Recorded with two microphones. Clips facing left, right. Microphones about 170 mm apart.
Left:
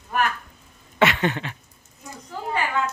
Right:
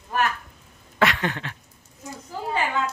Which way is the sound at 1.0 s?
Centre (ahead or behind).